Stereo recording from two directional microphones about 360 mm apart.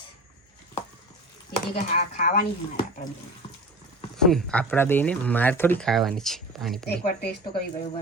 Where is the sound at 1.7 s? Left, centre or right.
Centre.